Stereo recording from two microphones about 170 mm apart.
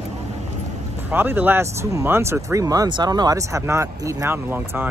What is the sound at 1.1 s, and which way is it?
Speech, 10° right (ahead or behind).